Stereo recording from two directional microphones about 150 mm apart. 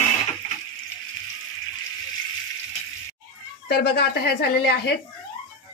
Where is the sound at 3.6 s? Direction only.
90° left.